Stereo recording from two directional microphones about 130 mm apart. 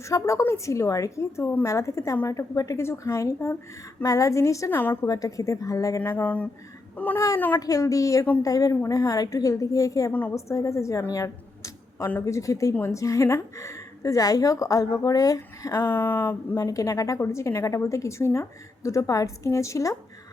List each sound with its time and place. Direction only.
0.0 s a woman's voice: 25° left (ahead or behind)
5.0 s a woman's voice: 30° left (ahead or behind)
6.0 s a sound: 15° left (ahead or behind)
7.6 s a woman's voice: 25° left (ahead or behind)
10.1 s a woman's voice: 15° left (ahead or behind)